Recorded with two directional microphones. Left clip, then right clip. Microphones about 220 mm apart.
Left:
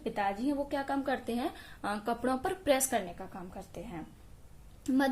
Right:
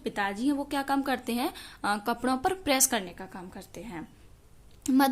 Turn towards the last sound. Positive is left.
turn(degrees=-30)  # may be behind; listen again after turning